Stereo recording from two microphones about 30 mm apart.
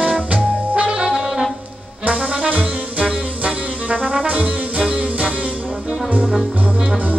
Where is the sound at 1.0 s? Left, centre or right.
Centre.